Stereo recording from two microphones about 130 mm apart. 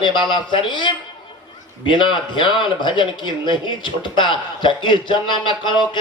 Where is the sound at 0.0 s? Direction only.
35° left (ahead or behind).